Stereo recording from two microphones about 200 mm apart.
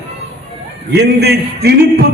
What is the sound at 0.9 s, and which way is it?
A man's voice, 55° right (ahead or behind).